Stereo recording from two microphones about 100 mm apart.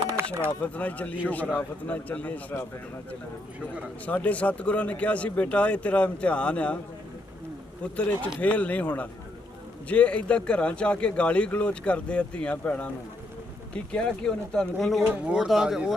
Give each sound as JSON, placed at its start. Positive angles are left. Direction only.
{"t": 0.2, "sound": "a sound", "side_deg": -25}
{"t": 0.6, "sound": "speech", "side_deg": 15}
{"t": 4.0, "sound": "speech", "side_deg": 15}
{"t": 7.9, "sound": "speech", "side_deg": 15}
{"t": 15.0, "sound": "speech", "side_deg": -20}
{"t": 15.4, "sound": "speech", "side_deg": -5}